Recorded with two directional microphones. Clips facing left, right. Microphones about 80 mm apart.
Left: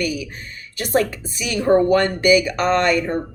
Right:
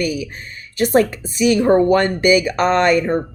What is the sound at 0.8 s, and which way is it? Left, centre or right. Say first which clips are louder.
A woman's voice: right 5 dB; right.